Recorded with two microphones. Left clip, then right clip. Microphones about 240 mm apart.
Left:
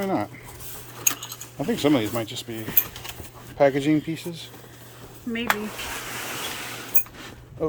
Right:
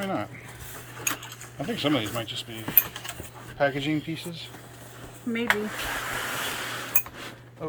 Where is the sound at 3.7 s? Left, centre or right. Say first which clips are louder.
Left 6 dB; centre.